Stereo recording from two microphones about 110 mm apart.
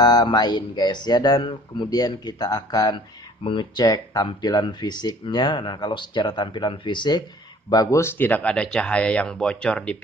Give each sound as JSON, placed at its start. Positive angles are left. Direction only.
{"t": 0.0, "sound": "speech", "side_deg": 40}
{"t": 8.0, "sound": "speech", "side_deg": 20}